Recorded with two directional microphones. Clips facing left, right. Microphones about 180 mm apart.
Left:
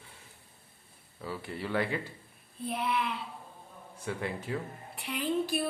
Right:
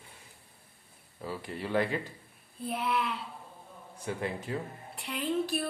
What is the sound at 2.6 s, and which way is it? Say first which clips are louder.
Speech: even; centre (ahead or behind).